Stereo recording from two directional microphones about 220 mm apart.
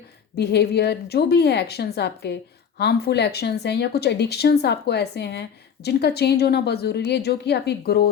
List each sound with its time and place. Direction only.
0.3 s a woman's voice: 50° left (ahead or behind)